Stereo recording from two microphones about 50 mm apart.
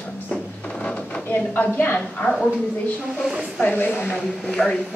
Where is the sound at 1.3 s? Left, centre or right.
Left.